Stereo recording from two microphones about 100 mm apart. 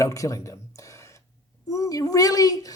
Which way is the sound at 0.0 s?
30° left (ahead or behind).